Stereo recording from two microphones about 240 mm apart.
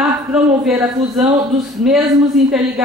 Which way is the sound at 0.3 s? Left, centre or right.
Centre.